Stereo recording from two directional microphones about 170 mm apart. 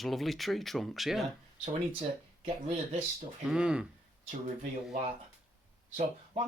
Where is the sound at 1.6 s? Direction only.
40° right (ahead or behind).